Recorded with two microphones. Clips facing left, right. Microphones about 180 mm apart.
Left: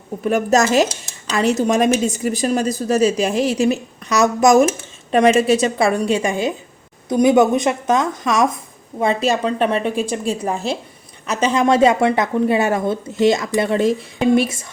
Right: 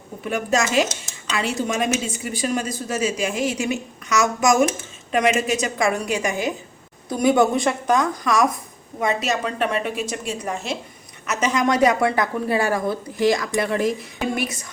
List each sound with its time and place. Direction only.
0.3 s speech: 40° left (ahead or behind)